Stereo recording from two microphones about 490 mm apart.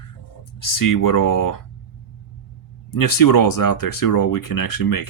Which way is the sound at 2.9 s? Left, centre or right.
Left.